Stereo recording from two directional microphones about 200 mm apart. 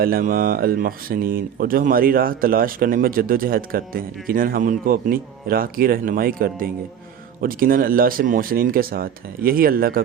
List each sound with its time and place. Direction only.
0.0 s speech: 45° right (ahead or behind)